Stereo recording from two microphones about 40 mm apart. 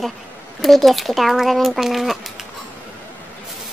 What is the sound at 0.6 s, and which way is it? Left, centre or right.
Speech, centre.